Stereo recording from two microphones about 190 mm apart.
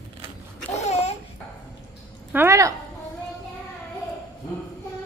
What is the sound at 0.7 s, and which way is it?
Babbling, 35° left (ahead or behind).